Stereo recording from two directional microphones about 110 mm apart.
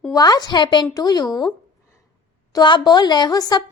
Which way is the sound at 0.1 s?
35° left (ahead or behind).